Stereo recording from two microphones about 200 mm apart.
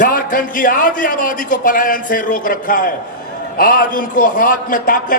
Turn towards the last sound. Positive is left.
turn(degrees=45)  # may be behind; listen again after turning